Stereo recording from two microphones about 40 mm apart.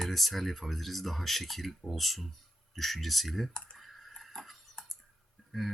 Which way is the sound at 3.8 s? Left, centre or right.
Centre.